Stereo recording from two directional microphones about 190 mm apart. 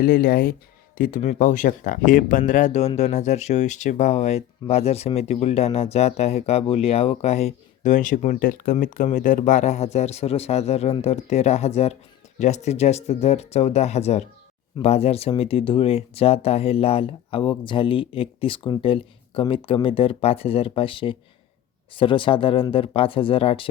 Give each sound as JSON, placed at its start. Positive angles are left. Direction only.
{"t": 0.0, "sound": "speech", "side_deg": 50}